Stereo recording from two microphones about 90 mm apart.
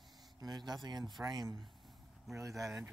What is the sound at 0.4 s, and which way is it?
Speech, 45° right (ahead or behind).